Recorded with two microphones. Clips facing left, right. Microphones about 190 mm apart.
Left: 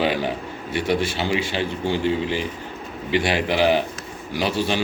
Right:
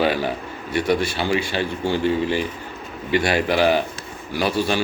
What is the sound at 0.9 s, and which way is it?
A man's voice, 15° left (ahead or behind).